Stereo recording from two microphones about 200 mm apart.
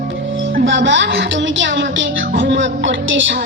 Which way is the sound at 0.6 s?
65° right (ahead or behind).